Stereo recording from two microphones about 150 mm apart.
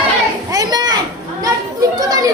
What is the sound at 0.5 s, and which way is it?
Children playing, 25° right (ahead or behind).